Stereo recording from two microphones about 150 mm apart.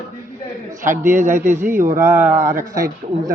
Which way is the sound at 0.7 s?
55° right (ahead or behind).